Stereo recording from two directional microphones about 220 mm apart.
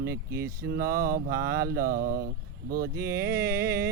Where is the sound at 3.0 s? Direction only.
15° right (ahead or behind).